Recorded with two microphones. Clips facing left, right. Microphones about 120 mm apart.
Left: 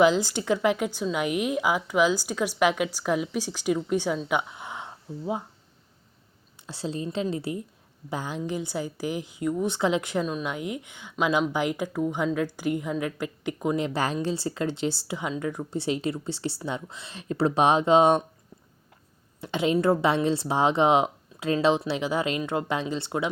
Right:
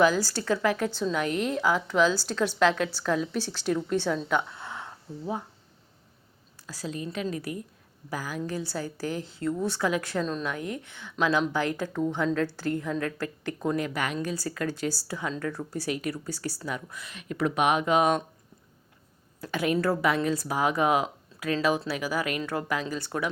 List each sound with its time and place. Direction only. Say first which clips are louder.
0.0 s a woman's voice: left 2 dB; 20° left (ahead or behind)
4.3 s a sound: even; 15° left (ahead or behind)
6.7 s a woman's voice: left 3 dB; 25° left (ahead or behind)
19.4 s a woman's voice: left 2 dB; 25° left (ahead or behind)